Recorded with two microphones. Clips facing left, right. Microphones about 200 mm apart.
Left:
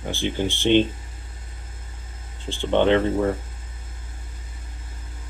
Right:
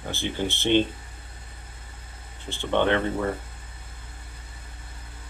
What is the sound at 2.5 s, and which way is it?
Speech, 15° left (ahead or behind).